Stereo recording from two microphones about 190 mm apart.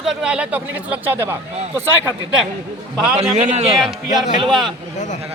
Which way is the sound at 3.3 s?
35° right (ahead or behind).